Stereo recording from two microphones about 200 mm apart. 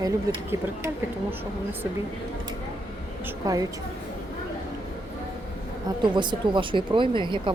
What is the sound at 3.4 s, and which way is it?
Speech, 15° right (ahead or behind).